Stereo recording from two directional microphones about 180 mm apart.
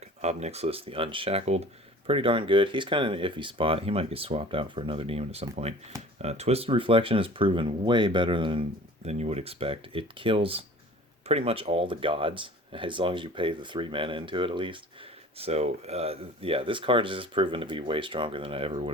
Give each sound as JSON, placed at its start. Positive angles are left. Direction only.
{"t": 0.2, "sound": "speech", "side_deg": -40}